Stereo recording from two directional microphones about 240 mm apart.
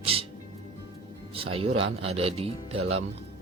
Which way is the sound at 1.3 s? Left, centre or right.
Right.